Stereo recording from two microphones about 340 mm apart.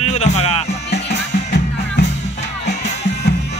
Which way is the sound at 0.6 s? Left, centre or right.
Left.